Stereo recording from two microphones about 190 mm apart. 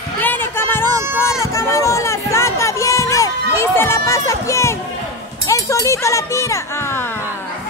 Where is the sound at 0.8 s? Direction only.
15° right (ahead or behind).